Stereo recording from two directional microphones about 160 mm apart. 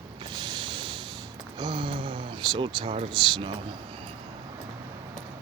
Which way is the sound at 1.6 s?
30° right (ahead or behind).